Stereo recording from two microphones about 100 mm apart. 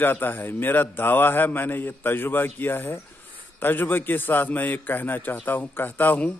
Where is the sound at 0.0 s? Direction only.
20° left (ahead or behind).